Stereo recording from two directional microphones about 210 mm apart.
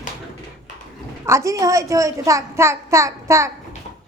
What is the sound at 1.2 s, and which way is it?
A woman's voice, 15° right (ahead or behind).